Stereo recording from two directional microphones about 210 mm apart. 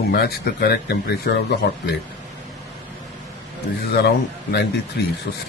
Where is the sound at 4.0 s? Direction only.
50° left (ahead or behind).